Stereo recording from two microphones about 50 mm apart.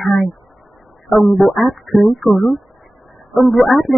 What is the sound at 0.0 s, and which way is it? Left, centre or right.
Speech, centre.